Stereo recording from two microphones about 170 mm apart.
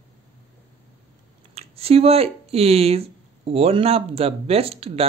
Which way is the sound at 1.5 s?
35° right (ahead or behind).